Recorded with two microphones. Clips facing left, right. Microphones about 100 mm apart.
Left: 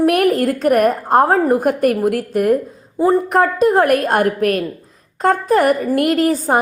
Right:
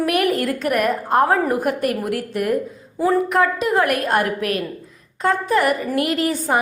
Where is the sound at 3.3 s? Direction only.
40° left (ahead or behind).